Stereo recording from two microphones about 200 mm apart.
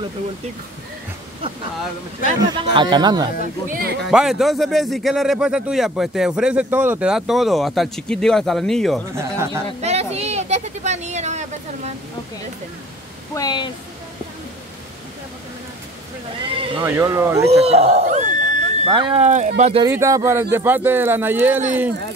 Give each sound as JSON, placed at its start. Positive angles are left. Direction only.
{"t": 2.3, "sound": "speech", "side_deg": -25}
{"t": 3.6, "sound": "speech", "side_deg": -45}
{"t": 4.1, "sound": "a man's voice", "side_deg": 0}
{"t": 9.1, "sound": "speech", "side_deg": -15}
{"t": 9.8, "sound": "speech", "side_deg": -30}
{"t": 13.3, "sound": "speech", "side_deg": 20}
{"t": 16.5, "sound": "speech", "side_deg": -25}
{"t": 16.8, "sound": "speech", "side_deg": -15}
{"t": 17.5, "sound": "a man's voice", "side_deg": -30}
{"t": 18.9, "sound": "a man's voice", "side_deg": -25}
{"t": 19.8, "sound": "speech", "side_deg": -15}